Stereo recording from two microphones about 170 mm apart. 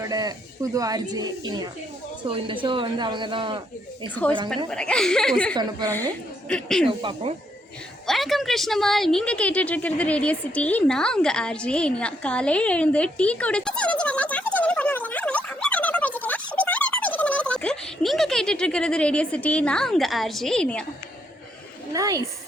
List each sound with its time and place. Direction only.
0.0 s speech: 20° right (ahead or behind)
4.1 s a woman's voice: 10° left (ahead or behind)
6.8 s speech: 30° right (ahead or behind)
8.0 s a woman's voice: centre (ahead or behind)
16.6 s a sound: 10° left (ahead or behind)
21.9 s speech: 20° right (ahead or behind)